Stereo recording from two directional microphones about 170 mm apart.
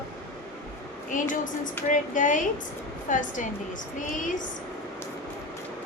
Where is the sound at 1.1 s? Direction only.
50° left (ahead or behind).